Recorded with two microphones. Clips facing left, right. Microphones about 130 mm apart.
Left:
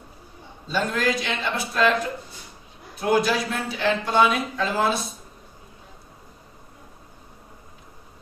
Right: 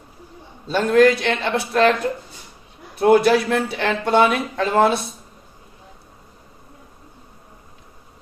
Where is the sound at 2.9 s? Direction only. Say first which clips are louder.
Right 7 dB; 65° right (ahead or behind).